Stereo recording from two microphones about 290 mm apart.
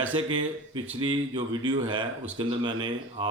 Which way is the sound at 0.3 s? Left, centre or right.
Centre.